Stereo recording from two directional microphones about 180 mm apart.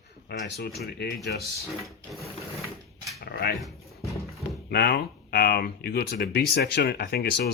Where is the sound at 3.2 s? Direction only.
65° left (ahead or behind).